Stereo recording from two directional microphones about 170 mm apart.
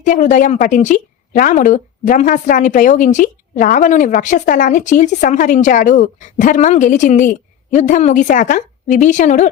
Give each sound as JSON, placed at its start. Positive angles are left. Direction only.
{"t": 0.0, "sound": "a woman's voice", "side_deg": 45}